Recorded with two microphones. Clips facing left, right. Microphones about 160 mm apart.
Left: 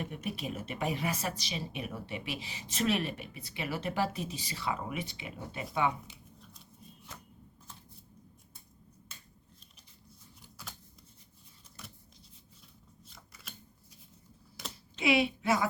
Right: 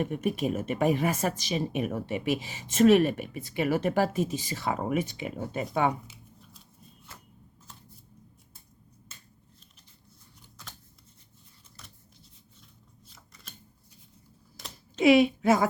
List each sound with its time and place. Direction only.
0.0 s a woman's voice: 50° right (ahead or behind)
13.1 s scissors: centre (ahead or behind)
14.9 s a woman's voice: 45° right (ahead or behind)